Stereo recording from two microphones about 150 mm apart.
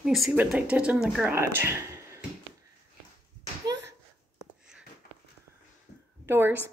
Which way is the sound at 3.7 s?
30° right (ahead or behind).